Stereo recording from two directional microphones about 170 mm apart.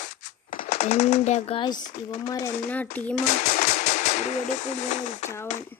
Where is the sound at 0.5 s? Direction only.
40° left (ahead or behind).